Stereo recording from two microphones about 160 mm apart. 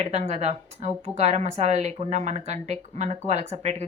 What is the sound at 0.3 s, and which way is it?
A woman's voice, 45° right (ahead or behind).